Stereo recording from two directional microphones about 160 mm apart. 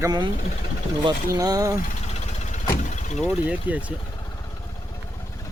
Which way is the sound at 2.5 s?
50° left (ahead or behind).